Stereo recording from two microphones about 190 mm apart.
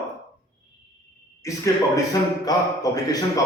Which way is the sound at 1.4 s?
15° left (ahead or behind).